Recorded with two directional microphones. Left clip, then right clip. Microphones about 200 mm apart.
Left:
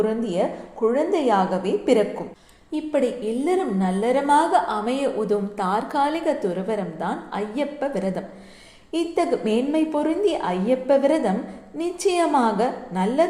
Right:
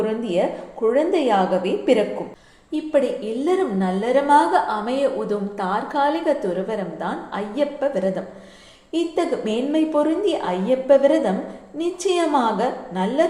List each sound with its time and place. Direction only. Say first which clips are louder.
0.0 s a woman's voice: right 1 dB; 25° left (ahead or behind)